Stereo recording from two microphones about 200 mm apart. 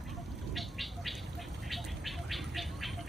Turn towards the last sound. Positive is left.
turn(degrees=0)  # may be behind; listen again after turning